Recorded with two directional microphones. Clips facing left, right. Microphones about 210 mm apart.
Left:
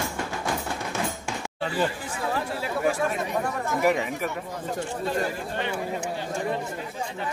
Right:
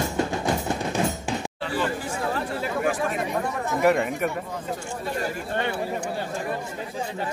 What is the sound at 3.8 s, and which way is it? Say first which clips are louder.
Speech: right 4 dB; 5° left (ahead or behind).